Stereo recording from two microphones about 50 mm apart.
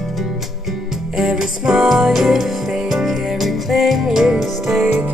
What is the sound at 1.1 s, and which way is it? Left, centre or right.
Music, centre.